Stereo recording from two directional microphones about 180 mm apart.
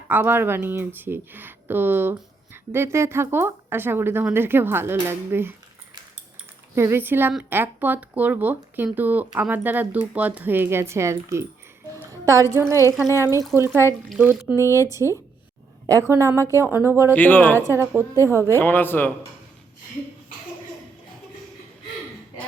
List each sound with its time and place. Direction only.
0.1 s a woman's voice: 10° right (ahead or behind)
13.7 s speech: 15° left (ahead or behind)
14.1 s speech: 5° right (ahead or behind)
14.5 s speech: 15° left (ahead or behind)
14.8 s speech: 15° right (ahead or behind)
17.2 s speech: 10° left (ahead or behind)
17.7 s speech: 15° right (ahead or behind)
18.5 s speech: 10° left (ahead or behind)